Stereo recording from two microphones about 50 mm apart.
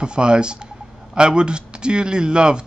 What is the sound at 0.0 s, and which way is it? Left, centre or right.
Speech, centre.